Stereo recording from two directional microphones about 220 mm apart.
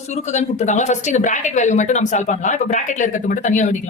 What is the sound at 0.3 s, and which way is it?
Speech, 30° left (ahead or behind).